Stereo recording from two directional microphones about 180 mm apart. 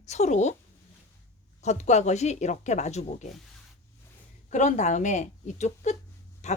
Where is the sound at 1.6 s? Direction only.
40° left (ahead or behind).